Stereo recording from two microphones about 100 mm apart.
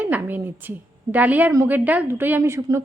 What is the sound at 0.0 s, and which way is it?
A woman's voice, 15° right (ahead or behind).